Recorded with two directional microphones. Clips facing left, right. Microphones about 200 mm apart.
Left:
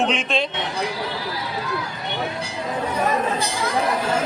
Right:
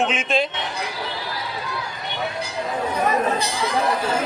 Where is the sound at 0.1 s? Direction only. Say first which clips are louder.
Right 1 dB; centre (ahead or behind).